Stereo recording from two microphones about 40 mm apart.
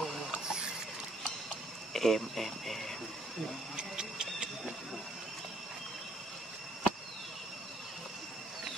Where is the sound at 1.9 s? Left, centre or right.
Centre.